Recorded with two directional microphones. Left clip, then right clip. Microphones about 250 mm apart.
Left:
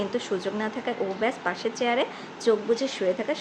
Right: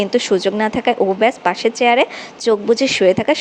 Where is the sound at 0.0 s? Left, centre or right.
Right.